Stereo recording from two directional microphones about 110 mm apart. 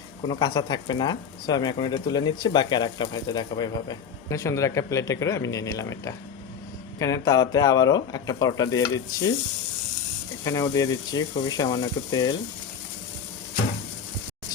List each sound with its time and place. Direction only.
0.3 s speech: 40° left (ahead or behind)
10.4 s speech: 30° left (ahead or behind)